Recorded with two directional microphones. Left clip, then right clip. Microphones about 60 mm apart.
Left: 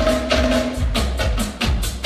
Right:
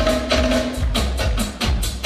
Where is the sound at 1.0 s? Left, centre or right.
Left.